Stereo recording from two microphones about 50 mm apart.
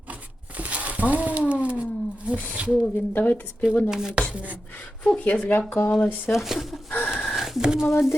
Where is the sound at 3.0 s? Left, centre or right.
Left.